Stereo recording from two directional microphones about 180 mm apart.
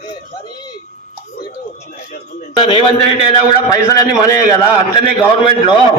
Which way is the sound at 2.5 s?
30° left (ahead or behind).